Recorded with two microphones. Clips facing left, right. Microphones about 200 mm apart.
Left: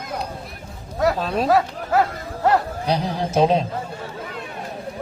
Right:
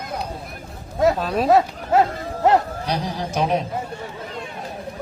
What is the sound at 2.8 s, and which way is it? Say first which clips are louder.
Speech: left 3 dB; 25° left (ahead or behind).